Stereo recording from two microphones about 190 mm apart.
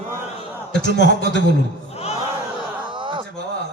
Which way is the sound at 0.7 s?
70° left (ahead or behind).